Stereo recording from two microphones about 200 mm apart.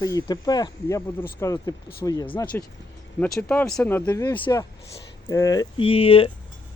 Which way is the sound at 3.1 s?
5° left (ahead or behind).